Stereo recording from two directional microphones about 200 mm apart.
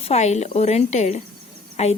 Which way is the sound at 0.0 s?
35° left (ahead or behind).